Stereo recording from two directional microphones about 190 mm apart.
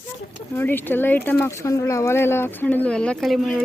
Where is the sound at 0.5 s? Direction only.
10° left (ahead or behind).